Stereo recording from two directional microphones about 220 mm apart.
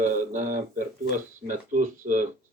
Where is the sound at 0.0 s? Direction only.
35° right (ahead or behind).